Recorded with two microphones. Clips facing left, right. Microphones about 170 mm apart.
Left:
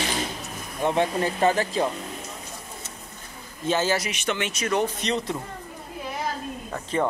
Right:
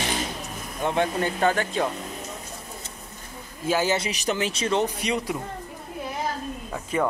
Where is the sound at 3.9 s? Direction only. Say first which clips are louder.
Right 1 dB; 30° right (ahead or behind).